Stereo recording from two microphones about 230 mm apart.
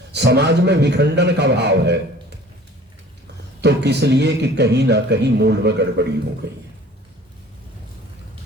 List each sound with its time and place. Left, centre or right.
0.1 s a man's voice: right
3.6 s a man's voice: right